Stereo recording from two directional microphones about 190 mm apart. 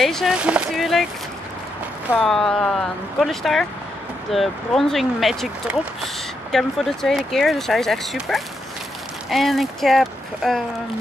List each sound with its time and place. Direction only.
0.0 s speech: centre (ahead or behind)
2.1 s speech: centre (ahead or behind)
6.5 s speech: centre (ahead or behind)